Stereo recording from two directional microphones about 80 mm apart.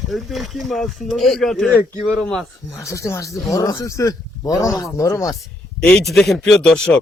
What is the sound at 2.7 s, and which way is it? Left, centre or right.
Speech, left.